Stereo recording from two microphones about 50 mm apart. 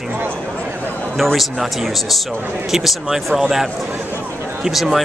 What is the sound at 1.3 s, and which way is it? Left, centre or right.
Speech, centre.